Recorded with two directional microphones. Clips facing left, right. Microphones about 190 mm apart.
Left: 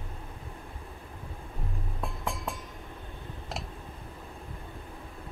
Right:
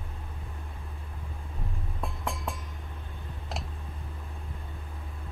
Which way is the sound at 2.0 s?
Centre (ahead or behind).